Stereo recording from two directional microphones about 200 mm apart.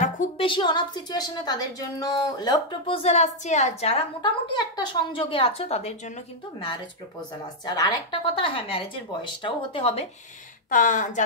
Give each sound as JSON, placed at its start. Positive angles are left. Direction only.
{"t": 0.0, "sound": "a sound", "side_deg": 35}
{"t": 0.5, "sound": "a woman's voice", "side_deg": 25}
{"t": 6.6, "sound": "a woman's voice", "side_deg": 20}
{"t": 10.7, "sound": "speech", "side_deg": 40}